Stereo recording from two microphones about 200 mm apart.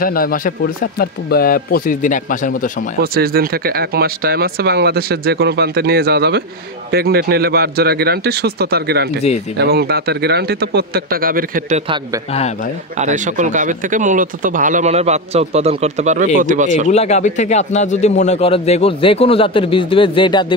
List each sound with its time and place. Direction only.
0.0 s speech: 45° left (ahead or behind)
3.0 s speech: 50° right (ahead or behind)
13.0 s speech: 40° right (ahead or behind)
16.9 s speech: 35° left (ahead or behind)